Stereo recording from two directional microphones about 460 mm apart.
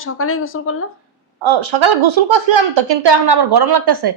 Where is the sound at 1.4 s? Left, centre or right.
Right.